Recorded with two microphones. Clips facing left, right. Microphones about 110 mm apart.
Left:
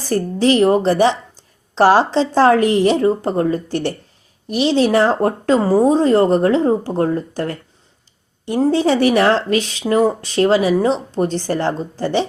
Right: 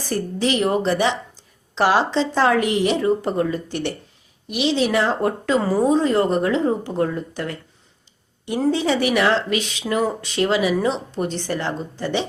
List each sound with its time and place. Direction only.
0.0 s speech: 35° left (ahead or behind)